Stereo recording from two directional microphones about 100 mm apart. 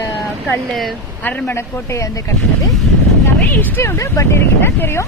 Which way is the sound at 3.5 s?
20° left (ahead or behind).